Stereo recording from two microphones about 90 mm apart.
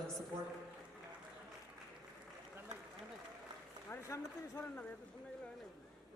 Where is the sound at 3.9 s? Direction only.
25° left (ahead or behind).